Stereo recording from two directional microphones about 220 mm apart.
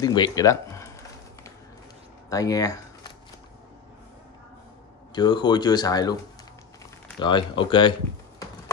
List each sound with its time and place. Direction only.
0.0 s speech: 20° left (ahead or behind)
2.2 s a sound: 15° left (ahead or behind)
5.1 s speech: 20° left (ahead or behind)
7.2 s speech: 20° left (ahead or behind)